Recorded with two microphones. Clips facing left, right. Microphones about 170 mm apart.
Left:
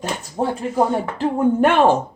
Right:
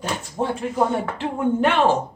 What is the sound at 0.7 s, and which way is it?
Speech, 40° left (ahead or behind).